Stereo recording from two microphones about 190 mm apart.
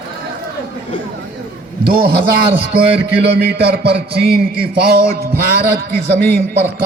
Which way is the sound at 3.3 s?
60° right (ahead or behind).